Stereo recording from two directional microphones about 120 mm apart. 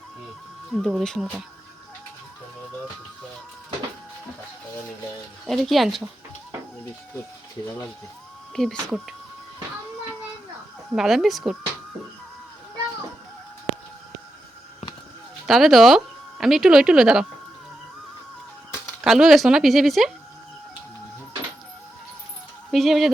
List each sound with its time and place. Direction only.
0.7 s speech: centre (ahead or behind)
5.5 s speech: centre (ahead or behind)
8.6 s speech: 5° left (ahead or behind)
10.9 s speech: 5° right (ahead or behind)
15.4 s speech: centre (ahead or behind)
19.0 s speech: centre (ahead or behind)
22.7 s speech: centre (ahead or behind)